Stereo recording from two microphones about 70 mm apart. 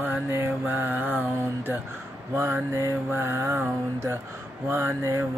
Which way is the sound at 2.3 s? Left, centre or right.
Right.